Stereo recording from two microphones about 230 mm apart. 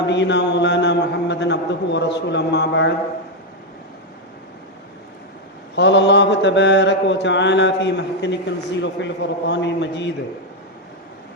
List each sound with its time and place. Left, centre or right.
0.1 s mantra: left
5.7 s mantra: left